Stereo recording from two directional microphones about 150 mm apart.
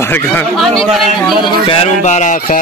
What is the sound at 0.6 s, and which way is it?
Speech, centre (ahead or behind).